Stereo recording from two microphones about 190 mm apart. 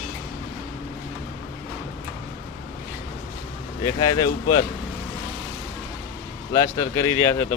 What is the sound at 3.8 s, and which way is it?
Speech, 20° left (ahead or behind).